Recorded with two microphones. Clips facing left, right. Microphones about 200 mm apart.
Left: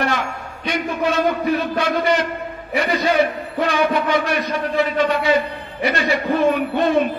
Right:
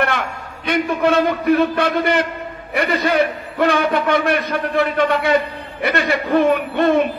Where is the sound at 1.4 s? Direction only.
55° right (ahead or behind).